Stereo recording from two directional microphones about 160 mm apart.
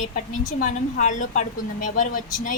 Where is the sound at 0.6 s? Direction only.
50° left (ahead or behind).